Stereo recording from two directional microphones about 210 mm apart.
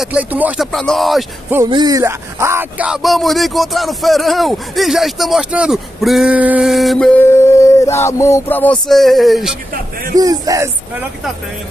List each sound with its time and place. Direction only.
0.0 s speech: 5° right (ahead or behind)
1.7 s speech: 20° right (ahead or behind); by 9.6 s centre (ahead or behind)
10.1 s speech: 15° right (ahead or behind)